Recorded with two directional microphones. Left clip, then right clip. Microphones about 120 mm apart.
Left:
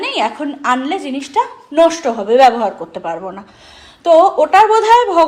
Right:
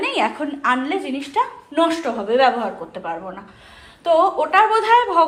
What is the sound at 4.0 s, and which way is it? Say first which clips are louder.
A woman's voice: left 7 dB; 90° left.